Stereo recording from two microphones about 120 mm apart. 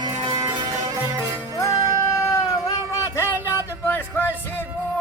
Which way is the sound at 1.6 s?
30° left (ahead or behind).